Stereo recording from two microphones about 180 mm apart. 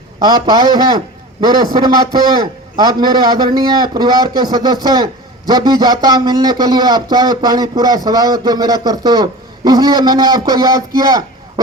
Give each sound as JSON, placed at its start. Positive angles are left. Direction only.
{"t": 0.2, "sound": "speech", "side_deg": -20}